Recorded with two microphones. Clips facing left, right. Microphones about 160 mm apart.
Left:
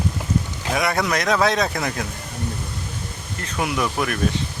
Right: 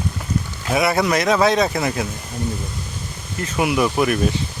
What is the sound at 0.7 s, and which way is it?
Speech, 5° right (ahead or behind).